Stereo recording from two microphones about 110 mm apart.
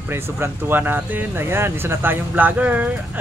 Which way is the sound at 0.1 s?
20° right (ahead or behind).